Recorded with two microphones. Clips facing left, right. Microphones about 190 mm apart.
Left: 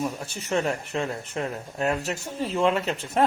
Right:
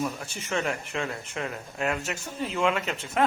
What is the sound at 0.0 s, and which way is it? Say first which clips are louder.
Speech: left 1 dB; 35° left (ahead or behind).